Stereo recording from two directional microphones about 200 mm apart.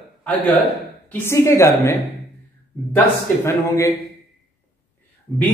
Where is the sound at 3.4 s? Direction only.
15° left (ahead or behind).